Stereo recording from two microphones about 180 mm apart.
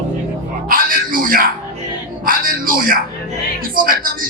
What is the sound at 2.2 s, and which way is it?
A woman's voice, 50° right (ahead or behind).